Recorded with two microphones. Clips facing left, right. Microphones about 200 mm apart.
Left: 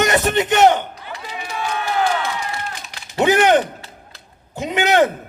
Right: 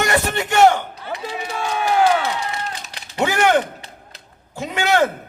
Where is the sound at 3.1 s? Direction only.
20° left (ahead or behind).